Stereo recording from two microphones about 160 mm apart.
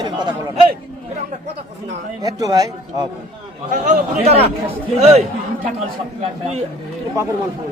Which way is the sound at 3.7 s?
50° right (ahead or behind).